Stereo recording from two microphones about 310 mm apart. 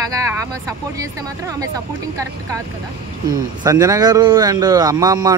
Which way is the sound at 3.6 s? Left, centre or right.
Centre.